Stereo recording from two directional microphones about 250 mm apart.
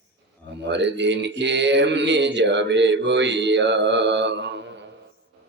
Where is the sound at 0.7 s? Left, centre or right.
Right.